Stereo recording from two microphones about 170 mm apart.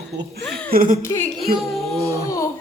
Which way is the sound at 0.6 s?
60° right (ahead or behind).